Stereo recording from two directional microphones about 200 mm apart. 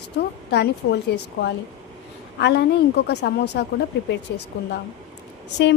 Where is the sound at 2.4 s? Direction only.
55° left (ahead or behind).